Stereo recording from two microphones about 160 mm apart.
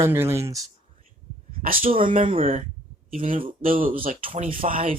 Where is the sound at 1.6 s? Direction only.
60° right (ahead or behind).